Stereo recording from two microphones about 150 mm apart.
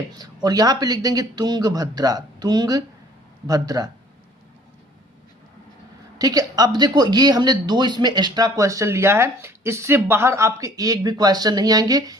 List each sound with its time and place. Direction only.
0.4 s speech: 25° right (ahead or behind)
6.1 s speech: 25° right (ahead or behind)